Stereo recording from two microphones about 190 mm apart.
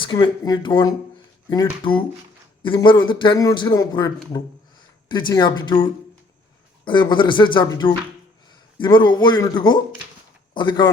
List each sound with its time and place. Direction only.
0.0 s a man's voice: 25° left (ahead or behind)